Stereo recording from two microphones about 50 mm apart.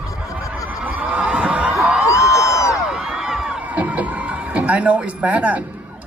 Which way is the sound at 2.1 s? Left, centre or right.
Left.